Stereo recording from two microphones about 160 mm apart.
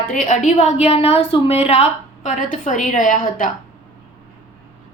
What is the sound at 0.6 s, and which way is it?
A woman's voice, 40° left (ahead or behind).